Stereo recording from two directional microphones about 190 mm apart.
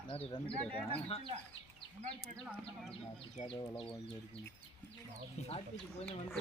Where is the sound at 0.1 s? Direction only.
30° left (ahead or behind).